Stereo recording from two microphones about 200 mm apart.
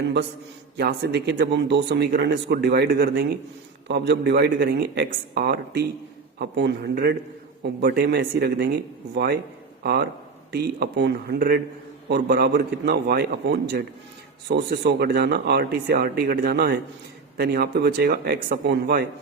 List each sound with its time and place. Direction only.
0.8 s speech: 55° right (ahead or behind)